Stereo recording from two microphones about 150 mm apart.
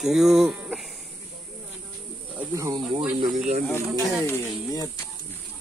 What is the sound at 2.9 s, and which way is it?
Speech, 35° right (ahead or behind).